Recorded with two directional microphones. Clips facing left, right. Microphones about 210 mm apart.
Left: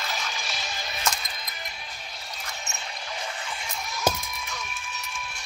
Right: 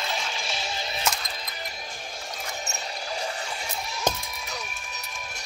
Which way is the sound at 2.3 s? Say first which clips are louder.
Right 3 dB; 40° right (ahead or behind).